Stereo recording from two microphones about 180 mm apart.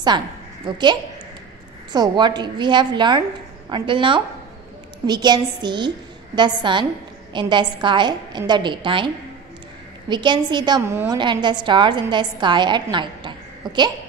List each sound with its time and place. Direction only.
0.7 s a woman's voice: 25° right (ahead or behind)
11.1 s a woman's voice: 25° right (ahead or behind)